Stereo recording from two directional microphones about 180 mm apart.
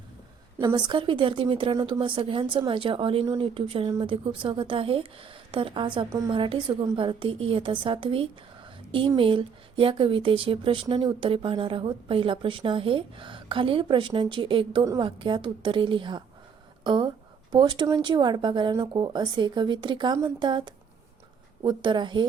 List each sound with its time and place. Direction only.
0.6 s speech: 25° right (ahead or behind)